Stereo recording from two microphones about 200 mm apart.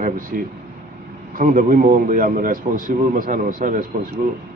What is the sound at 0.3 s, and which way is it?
A man's voice, 45° right (ahead or behind).